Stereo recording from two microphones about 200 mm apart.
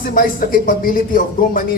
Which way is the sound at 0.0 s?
45° left (ahead or behind).